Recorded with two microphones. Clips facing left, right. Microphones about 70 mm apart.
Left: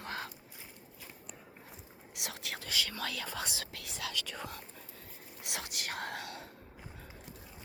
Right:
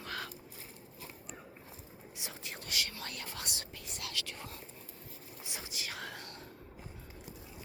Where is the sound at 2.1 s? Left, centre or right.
Left.